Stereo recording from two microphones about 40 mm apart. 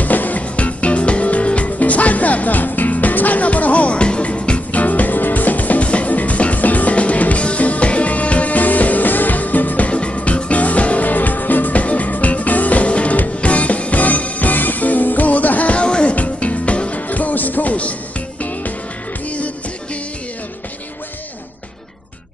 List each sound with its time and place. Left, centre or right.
0.0 s music: left
9.9 s music: left
17.1 s music: left